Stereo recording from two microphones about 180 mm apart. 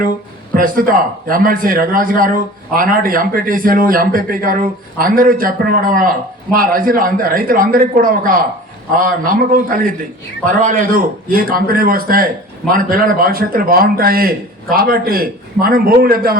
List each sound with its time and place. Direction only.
0.5 s a man's voice: 50° right (ahead or behind)